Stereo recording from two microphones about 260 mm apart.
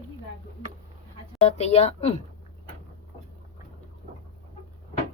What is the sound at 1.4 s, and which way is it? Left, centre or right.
Speech, left.